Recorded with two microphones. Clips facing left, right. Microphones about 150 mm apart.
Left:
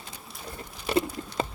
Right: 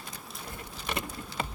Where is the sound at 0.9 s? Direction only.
30° left (ahead or behind).